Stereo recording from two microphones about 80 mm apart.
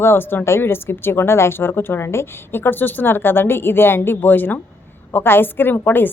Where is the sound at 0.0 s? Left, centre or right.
Left.